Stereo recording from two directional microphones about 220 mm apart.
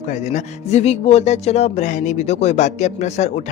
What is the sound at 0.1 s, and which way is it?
Speech, 30° left (ahead or behind).